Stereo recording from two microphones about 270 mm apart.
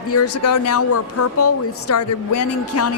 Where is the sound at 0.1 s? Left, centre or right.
Left.